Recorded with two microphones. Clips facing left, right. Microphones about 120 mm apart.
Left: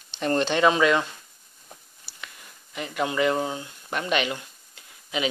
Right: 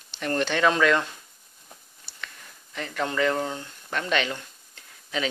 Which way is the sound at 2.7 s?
10° left (ahead or behind).